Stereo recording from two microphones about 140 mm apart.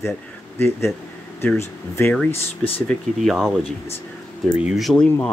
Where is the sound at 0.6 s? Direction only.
20° left (ahead or behind).